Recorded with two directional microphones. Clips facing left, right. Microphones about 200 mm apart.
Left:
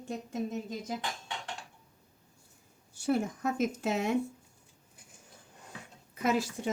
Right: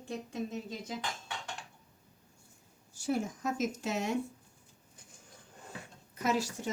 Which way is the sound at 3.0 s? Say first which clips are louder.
Left 3 dB; 60° left (ahead or behind).